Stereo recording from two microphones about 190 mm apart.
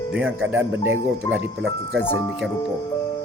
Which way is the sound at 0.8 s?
90° right.